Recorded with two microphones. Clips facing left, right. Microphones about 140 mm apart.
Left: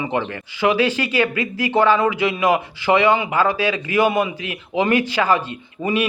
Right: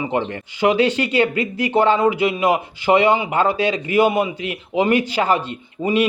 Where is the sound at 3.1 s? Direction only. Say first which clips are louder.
Even; 20° right (ahead or behind).